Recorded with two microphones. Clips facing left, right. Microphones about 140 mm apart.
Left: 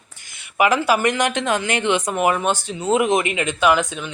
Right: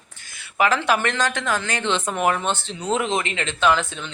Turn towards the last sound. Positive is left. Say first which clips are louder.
# left 3 dB
turn(degrees=10)  # may be behind; listen again after turning